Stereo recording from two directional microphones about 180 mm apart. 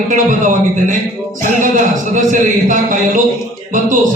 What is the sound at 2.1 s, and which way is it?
Speech, 45° right (ahead or behind).